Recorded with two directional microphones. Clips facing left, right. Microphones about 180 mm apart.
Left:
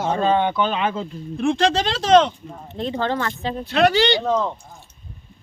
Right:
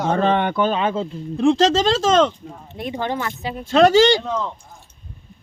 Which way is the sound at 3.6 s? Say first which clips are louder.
Right 5 dB; 45° right (ahead or behind).